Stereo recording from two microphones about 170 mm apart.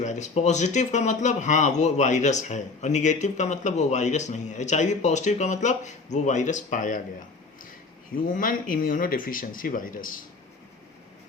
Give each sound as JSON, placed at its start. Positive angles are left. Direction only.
{"t": 0.0, "sound": "speech", "side_deg": 45}
{"t": 8.3, "sound": "speech", "side_deg": 55}